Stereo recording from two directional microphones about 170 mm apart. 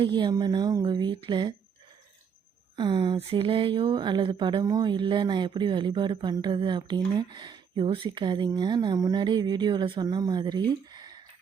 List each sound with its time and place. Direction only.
0.0 s speech: 25° right (ahead or behind)
2.7 s speech: 25° right (ahead or behind)